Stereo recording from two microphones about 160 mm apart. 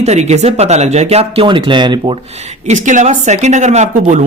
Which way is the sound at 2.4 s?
45° right (ahead or behind).